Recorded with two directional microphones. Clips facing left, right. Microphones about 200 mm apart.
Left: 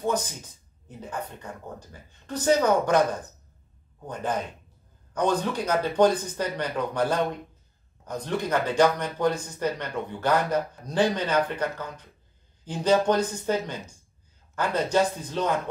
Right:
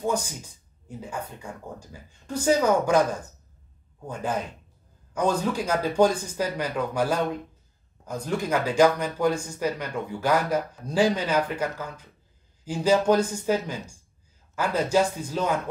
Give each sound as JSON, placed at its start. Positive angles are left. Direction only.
{"t": 0.8, "sound": "speech", "side_deg": -10}
{"t": 4.1, "sound": "speech", "side_deg": -10}